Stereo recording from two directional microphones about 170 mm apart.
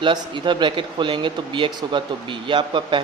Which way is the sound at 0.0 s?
30° right (ahead or behind).